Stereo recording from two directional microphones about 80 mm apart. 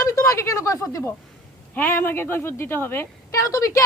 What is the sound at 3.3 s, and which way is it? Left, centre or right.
Speech, left.